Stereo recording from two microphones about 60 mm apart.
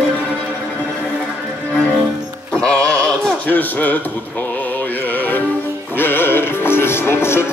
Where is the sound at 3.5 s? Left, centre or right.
Left.